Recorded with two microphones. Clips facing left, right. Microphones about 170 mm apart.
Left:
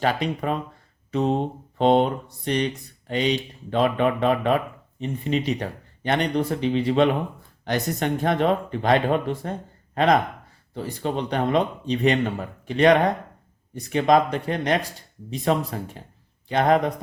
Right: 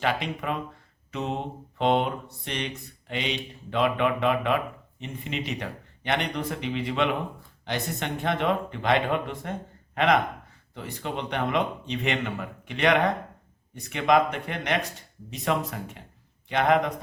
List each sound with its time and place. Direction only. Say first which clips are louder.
0.0 s speech: left 4 dB; 40° left (ahead or behind)